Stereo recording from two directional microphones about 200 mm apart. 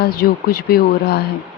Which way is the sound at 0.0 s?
45° left (ahead or behind).